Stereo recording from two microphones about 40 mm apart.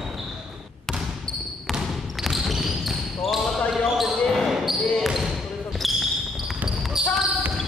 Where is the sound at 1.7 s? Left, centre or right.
Centre.